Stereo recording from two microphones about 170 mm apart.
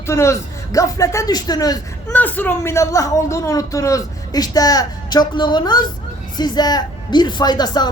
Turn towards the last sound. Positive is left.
turn(degrees=25)  # may be behind; listen again after turning